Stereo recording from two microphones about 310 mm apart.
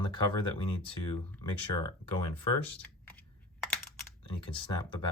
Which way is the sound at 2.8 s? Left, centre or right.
Centre.